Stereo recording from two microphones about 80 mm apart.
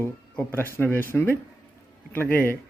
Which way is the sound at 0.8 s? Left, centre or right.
Left.